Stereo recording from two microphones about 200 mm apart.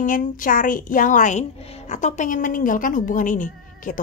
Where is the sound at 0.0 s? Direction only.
40° left (ahead or behind).